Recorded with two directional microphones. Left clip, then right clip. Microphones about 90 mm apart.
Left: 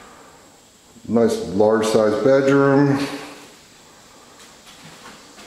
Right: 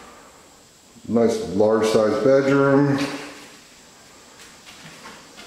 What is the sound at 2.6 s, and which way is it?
Speech, 35° left (ahead or behind).